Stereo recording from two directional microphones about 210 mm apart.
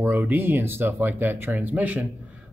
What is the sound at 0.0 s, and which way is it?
Speech, 10° right (ahead or behind).